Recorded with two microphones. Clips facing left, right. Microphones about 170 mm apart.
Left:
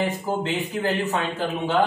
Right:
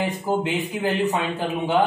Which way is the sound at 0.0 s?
15° right (ahead or behind).